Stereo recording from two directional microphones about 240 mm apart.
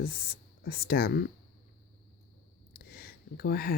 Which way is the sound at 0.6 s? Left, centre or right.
Left.